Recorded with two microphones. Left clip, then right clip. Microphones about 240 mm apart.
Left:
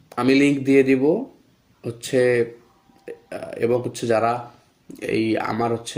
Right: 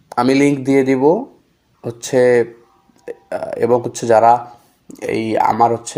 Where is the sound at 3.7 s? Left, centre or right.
Centre.